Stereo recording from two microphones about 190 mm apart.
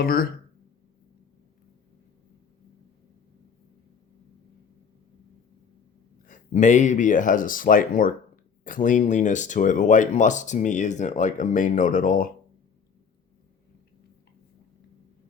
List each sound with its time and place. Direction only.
0.0 s speech: 50° left (ahead or behind)
6.2 s speech: 40° left (ahead or behind)